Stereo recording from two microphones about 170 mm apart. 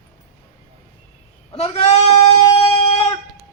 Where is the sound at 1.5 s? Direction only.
35° left (ahead or behind).